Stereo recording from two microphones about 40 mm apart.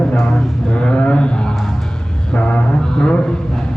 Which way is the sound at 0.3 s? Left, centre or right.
Left.